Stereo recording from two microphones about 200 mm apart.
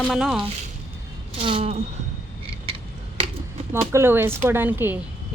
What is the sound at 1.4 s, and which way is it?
Speech, 30° right (ahead or behind).